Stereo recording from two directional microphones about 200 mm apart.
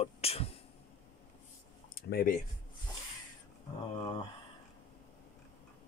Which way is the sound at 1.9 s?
45° left (ahead or behind).